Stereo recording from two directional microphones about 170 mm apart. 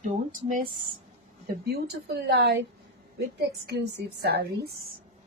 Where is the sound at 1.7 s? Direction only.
75° right (ahead or behind).